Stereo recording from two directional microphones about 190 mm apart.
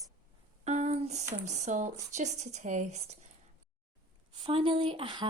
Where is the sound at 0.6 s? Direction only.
35° right (ahead or behind).